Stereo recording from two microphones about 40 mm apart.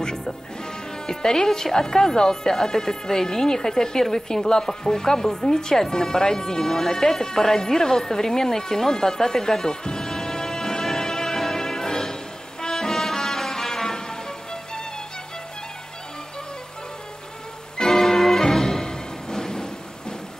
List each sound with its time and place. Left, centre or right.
0.0 s music: centre
1.0 s speech: centre
6.6 s music: centre
17.7 s music: centre